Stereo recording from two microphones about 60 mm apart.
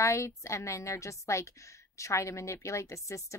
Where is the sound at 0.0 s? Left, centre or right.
Left.